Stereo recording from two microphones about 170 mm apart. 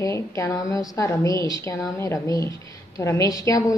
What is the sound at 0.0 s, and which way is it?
A woman's voice, 20° left (ahead or behind).